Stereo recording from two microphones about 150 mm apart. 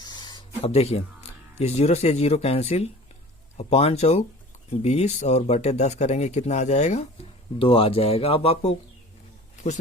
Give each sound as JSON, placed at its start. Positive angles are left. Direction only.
{"t": 0.0, "sound": "a sound", "side_deg": 30}
{"t": 0.6, "sound": "speech", "side_deg": 40}
{"t": 7.6, "sound": "speech", "side_deg": 40}